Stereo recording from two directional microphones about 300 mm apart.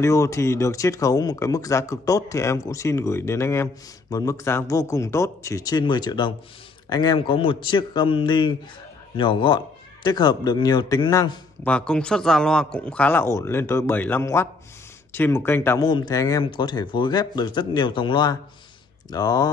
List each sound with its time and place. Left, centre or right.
0.0 s a man's voice: centre